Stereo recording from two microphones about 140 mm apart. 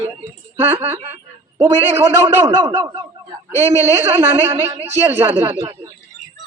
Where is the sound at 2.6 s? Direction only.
30° right (ahead or behind).